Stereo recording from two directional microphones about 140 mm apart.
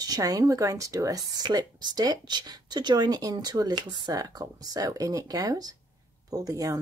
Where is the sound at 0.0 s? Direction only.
25° right (ahead or behind).